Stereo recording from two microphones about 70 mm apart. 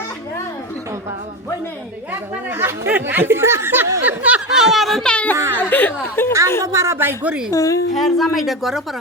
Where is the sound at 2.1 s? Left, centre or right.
Right.